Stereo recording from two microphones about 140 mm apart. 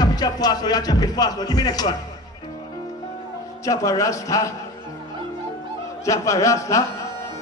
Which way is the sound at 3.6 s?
25° left (ahead or behind).